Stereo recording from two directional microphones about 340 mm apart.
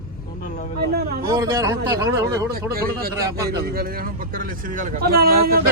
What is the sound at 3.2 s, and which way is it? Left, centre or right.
Speech, centre.